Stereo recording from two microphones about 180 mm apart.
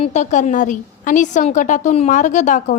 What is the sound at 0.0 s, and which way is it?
A woman's voice, 40° left (ahead or behind).